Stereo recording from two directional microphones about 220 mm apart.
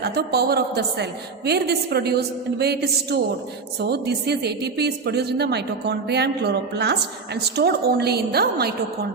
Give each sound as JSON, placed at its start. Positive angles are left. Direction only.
{"t": 0.0, "sound": "a woman's voice", "side_deg": -50}